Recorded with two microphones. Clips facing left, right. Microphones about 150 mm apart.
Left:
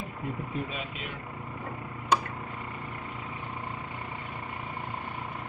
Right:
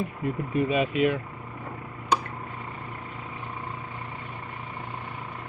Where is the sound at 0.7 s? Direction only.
70° right (ahead or behind).